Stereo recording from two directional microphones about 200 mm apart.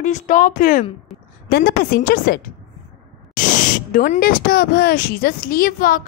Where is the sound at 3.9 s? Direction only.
40° left (ahead or behind).